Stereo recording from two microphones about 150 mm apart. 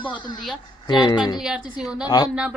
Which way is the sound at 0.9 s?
30° left (ahead or behind).